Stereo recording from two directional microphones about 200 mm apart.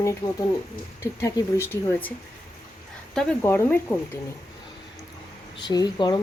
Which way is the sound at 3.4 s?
10° left (ahead or behind).